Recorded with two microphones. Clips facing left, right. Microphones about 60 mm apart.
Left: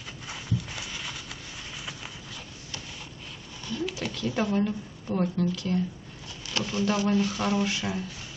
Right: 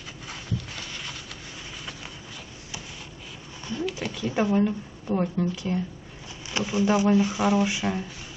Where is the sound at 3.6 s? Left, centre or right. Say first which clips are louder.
Right 2 dB; right.